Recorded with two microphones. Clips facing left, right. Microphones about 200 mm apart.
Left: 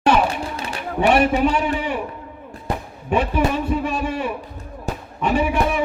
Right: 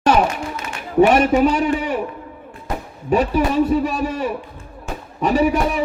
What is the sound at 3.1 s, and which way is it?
A man's voice, 40° right (ahead or behind).